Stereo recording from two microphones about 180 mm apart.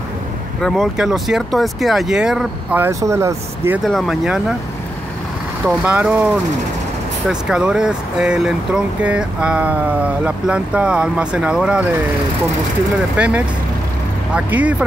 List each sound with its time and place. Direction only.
0.6 s speech: centre (ahead or behind)
3.8 s speech: centre (ahead or behind)
5.7 s speech: 5° right (ahead or behind)
7.2 s speech: 5° right (ahead or behind)
13.1 s speech: 10° right (ahead or behind)